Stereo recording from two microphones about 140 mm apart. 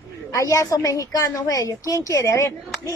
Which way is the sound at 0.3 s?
25° left (ahead or behind).